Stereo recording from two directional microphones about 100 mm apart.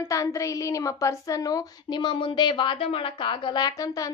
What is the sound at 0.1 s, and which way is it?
A woman's voice, 35° left (ahead or behind).